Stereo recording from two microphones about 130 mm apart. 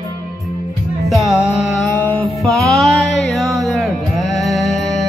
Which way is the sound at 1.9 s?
15° left (ahead or behind).